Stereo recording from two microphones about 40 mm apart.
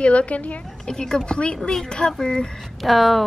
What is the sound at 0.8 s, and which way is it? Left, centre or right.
A woman's voice, centre.